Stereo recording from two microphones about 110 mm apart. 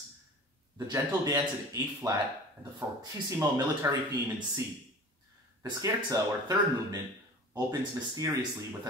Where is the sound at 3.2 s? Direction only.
25° right (ahead or behind).